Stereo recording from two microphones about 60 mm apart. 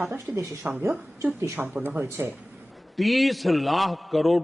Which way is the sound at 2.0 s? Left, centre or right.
Right.